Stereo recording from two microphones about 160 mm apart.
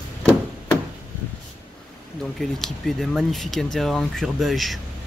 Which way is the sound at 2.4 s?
Centre (ahead or behind).